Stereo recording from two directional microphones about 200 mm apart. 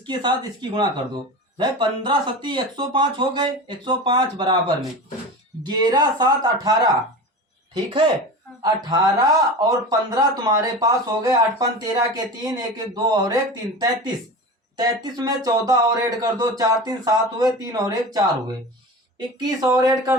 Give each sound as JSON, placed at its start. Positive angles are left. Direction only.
{"t": 0.0, "sound": "speech", "side_deg": -20}
{"t": 5.6, "sound": "speech", "side_deg": -20}
{"t": 14.8, "sound": "speech", "side_deg": -20}
{"t": 19.4, "sound": "speech", "side_deg": -20}